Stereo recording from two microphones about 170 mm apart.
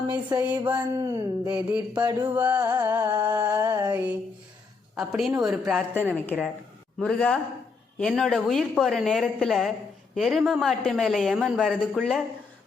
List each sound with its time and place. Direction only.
0.1 s a sound: 20° right (ahead or behind)
0.4 s music: 10° right (ahead or behind)
1.7 s music: 5° right (ahead or behind)
2.6 s a sound: 20° right (ahead or behind)
2.9 s music: 10° right (ahead or behind)
4.9 s a woman's voice: centre (ahead or behind)